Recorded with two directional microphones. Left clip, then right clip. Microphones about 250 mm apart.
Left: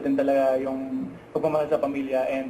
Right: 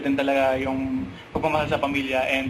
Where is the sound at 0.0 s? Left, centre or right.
Centre.